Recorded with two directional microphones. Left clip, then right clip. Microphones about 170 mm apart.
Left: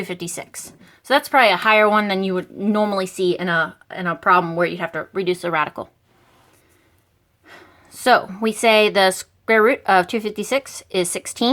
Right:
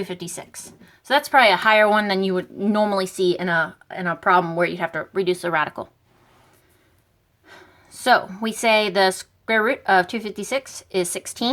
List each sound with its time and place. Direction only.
0.0 s speech: 35° left (ahead or behind); by 5.9 s 15° left (ahead or behind)
7.4 s a woman's voice: 20° left (ahead or behind)